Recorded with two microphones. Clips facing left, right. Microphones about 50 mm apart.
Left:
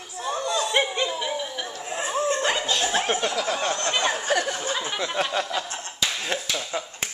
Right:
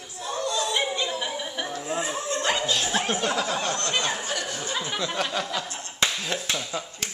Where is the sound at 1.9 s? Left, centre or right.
Left.